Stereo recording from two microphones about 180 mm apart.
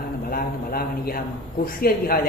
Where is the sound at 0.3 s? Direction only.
55° left (ahead or behind).